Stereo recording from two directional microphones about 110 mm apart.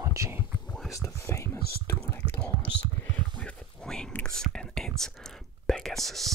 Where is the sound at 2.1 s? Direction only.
20° left (ahead or behind).